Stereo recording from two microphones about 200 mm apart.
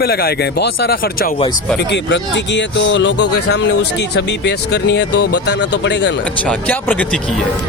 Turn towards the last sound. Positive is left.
turn(degrees=5)  # may be behind; listen again after turning